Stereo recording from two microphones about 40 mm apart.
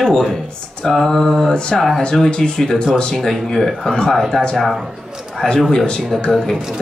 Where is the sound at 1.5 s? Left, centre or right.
Left.